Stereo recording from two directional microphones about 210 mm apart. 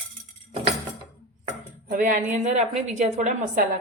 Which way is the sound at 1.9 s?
40° right (ahead or behind).